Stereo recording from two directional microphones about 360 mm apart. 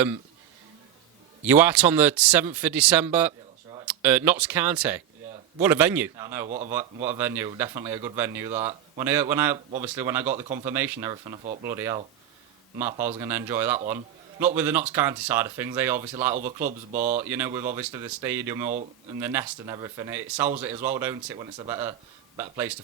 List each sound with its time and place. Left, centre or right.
1.5 s speech: centre
6.5 s speech: centre
6.7 s speech: centre
10.3 s speech: centre
10.7 s speech: centre
16.3 s speech: centre
17.2 s speech: centre